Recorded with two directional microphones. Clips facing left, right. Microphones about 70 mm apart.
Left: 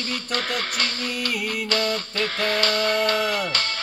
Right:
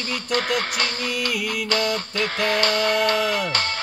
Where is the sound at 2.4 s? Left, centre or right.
Right.